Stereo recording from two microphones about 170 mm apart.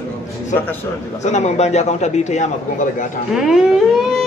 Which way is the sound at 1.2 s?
40° left (ahead or behind).